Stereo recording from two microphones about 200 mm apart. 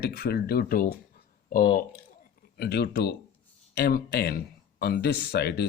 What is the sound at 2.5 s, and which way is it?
Speech, 55° left (ahead or behind).